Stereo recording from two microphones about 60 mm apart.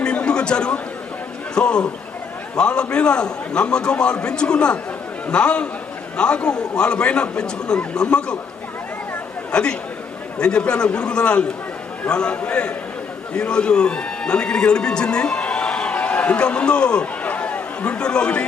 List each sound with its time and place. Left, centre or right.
0.0 s a sound: centre
1.5 s a man's voice: centre
9.5 s a man's voice: centre